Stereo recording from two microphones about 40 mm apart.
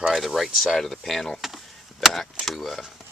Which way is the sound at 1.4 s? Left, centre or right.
Centre.